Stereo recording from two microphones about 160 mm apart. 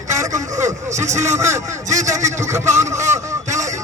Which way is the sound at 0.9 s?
45° right (ahead or behind).